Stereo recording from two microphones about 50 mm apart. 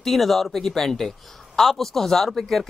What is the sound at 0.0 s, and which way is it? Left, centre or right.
A man's voice, centre.